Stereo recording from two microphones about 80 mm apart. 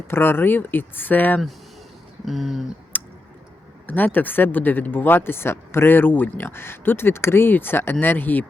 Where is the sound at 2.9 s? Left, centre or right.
Left.